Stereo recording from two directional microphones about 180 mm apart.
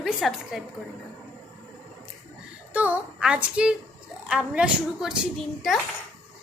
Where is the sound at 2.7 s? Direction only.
10° right (ahead or behind).